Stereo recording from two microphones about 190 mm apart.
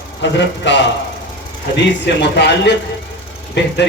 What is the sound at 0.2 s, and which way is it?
Speech, 70° left (ahead or behind).